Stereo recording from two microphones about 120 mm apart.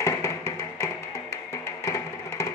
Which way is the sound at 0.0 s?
25° left (ahead or behind).